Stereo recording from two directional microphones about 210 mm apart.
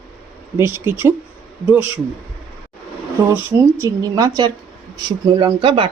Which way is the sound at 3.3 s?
15° right (ahead or behind).